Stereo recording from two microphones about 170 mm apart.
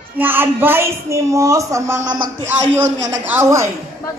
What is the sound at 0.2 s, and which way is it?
A man's voice, 10° right (ahead or behind).